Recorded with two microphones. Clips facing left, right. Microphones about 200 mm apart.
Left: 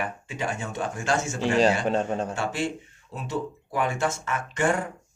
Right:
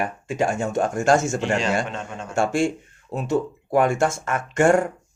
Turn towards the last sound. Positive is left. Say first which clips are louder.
# right 7 dB
turn(degrees=-45)  # may be behind; listen again after turning